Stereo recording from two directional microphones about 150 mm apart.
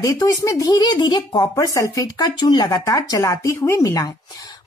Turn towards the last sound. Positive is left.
turn(degrees=25)  # may be behind; listen again after turning